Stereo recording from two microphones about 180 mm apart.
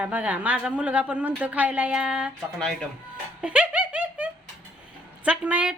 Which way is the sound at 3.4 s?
10° right (ahead or behind).